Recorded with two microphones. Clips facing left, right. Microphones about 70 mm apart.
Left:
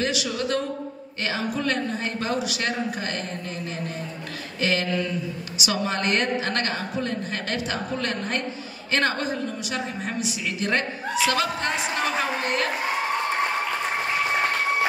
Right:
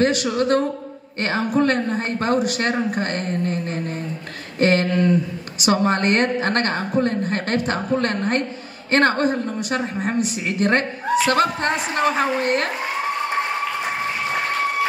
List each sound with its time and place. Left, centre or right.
0.0 s a woman's voice: right